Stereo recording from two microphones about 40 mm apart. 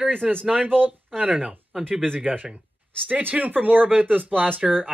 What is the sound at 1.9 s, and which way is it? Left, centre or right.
Speech, centre.